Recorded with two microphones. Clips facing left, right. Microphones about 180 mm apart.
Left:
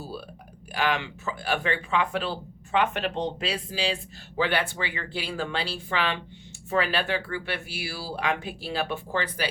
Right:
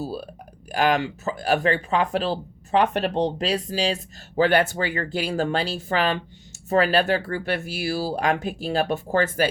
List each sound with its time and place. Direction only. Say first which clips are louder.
0.0 s speech: right 7 dB; 40° right (ahead or behind)